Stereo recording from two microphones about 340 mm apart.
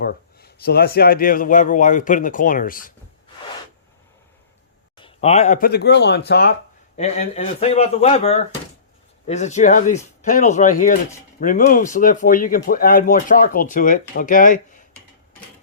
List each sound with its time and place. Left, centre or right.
0.0 s speech: left
4.9 s speech: centre